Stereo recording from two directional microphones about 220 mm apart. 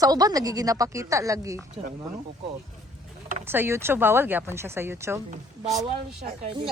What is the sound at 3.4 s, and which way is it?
Speech, 10° right (ahead or behind).